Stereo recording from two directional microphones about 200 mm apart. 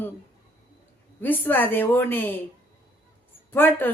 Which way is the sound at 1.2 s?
10° left (ahead or behind).